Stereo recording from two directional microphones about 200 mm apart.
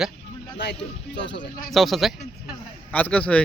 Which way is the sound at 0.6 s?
60° left (ahead or behind).